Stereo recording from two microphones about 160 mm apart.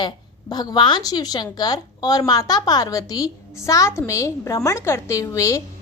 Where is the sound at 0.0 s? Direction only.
25° left (ahead or behind).